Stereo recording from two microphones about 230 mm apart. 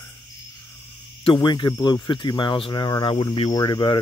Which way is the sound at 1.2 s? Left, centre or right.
Left.